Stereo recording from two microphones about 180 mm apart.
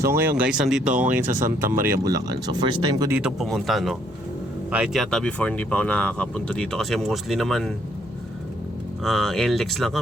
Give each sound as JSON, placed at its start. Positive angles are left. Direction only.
{"t": 0.0, "sound": "speech", "side_deg": -10}
{"t": 1.2, "sound": "speech", "side_deg": -45}
{"t": 1.8, "sound": "speech", "side_deg": -15}
{"t": 3.1, "sound": "speech", "side_deg": -5}
{"t": 9.0, "sound": "speech", "side_deg": 0}